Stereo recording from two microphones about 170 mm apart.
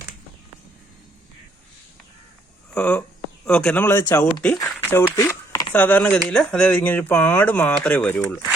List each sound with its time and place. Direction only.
2.7 s speech: 5° left (ahead or behind)
4.5 s a sound: 15° left (ahead or behind)
5.7 s speech: 10° left (ahead or behind)